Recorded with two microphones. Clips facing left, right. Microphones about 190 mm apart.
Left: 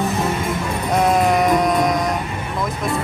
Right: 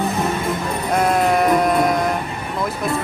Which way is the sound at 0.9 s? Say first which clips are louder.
Left 1 dB; centre (ahead or behind).